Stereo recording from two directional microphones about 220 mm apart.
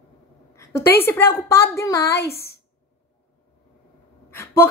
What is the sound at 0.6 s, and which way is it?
Speech, 10° left (ahead or behind).